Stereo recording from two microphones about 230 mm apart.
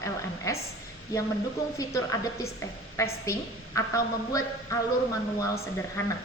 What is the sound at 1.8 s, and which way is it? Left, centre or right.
A woman's voice, centre.